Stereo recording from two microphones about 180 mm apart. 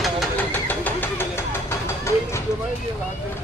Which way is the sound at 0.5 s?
10° left (ahead or behind).